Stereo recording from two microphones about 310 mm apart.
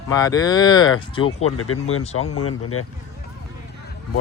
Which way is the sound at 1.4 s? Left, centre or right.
Left.